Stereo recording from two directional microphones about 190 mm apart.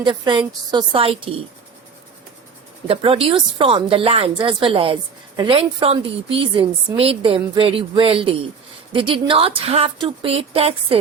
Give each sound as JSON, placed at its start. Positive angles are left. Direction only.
{"t": 0.0, "sound": "a woman's voice", "side_deg": -25}
{"t": 2.8, "sound": "a woman's voice", "side_deg": -30}